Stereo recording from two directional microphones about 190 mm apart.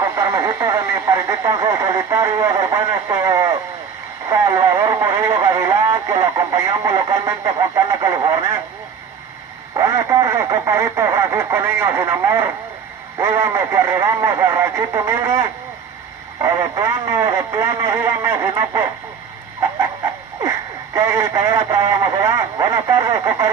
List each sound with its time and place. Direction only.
0.0 s speech: 15° right (ahead or behind)
4.3 s radio: 15° right (ahead or behind)
9.8 s speech: 15° right (ahead or behind)
20.4 s speech: 15° right (ahead or behind)